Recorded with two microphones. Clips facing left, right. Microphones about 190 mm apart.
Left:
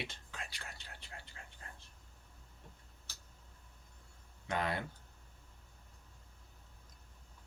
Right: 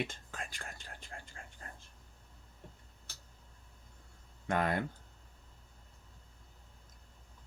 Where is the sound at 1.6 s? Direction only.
45° right (ahead or behind).